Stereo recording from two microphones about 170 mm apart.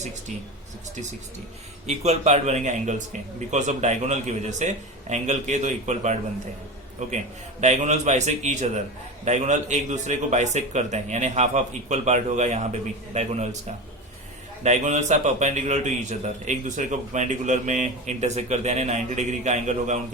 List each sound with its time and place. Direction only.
1.9 s a man's voice: 40° right (ahead or behind)